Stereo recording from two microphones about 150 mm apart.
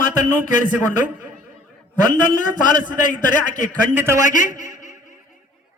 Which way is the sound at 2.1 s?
30° right (ahead or behind).